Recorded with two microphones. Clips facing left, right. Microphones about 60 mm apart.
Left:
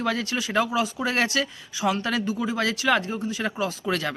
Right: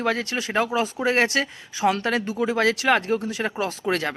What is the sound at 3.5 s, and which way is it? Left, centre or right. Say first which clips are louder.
Speech: right 2 dB; right.